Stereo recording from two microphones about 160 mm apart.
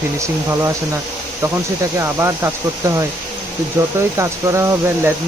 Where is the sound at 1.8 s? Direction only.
15° right (ahead or behind).